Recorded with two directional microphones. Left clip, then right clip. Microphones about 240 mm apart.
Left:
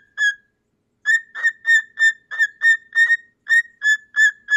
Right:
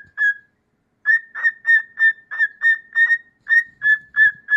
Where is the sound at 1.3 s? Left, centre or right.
Centre.